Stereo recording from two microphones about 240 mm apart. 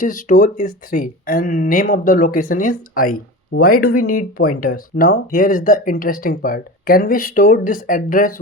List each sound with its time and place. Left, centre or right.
0.0 s speech: left